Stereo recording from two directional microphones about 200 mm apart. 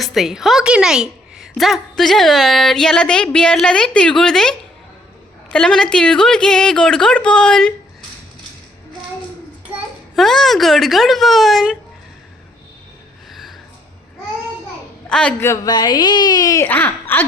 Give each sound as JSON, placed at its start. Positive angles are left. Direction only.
{"t": 0.0, "sound": "a woman's voice", "side_deg": 0}
{"t": 9.6, "sound": "a child's voice", "side_deg": -5}
{"t": 13.3, "sound": "a sound", "side_deg": 0}
{"t": 15.1, "sound": "a woman's voice", "side_deg": 5}